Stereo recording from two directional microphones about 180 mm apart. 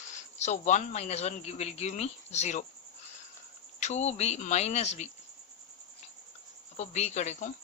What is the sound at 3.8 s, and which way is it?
Speech, 40° left (ahead or behind).